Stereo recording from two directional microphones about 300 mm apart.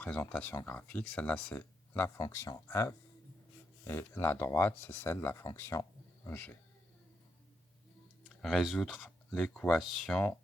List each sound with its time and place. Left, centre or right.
0.0 s speech: centre
8.2 s speech: centre